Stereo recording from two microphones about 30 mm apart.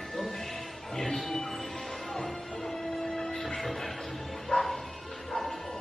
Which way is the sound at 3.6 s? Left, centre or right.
Centre.